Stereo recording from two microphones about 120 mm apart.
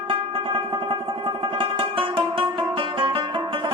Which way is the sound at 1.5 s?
45° right (ahead or behind).